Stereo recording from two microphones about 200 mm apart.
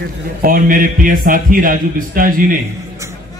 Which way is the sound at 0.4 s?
45° right (ahead or behind).